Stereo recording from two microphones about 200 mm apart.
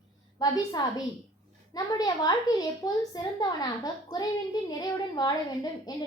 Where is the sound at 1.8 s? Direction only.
20° left (ahead or behind).